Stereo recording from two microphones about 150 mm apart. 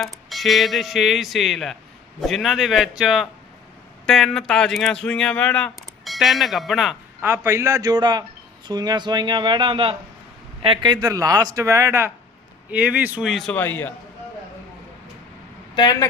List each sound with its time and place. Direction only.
0.0 s speech: centre (ahead or behind)
7.2 s speech: 15° right (ahead or behind); by 13.6 s centre (ahead or behind)
13.6 s a man's voice: 15° left (ahead or behind)
15.7 s speech: 30° left (ahead or behind)